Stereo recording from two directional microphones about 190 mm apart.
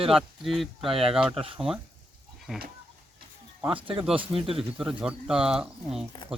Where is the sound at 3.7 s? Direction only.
25° right (ahead or behind).